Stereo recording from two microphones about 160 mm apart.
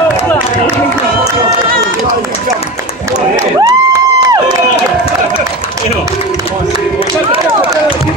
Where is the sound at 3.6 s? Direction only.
25° right (ahead or behind).